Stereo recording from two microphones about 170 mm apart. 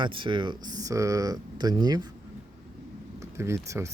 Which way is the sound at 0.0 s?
30° right (ahead or behind).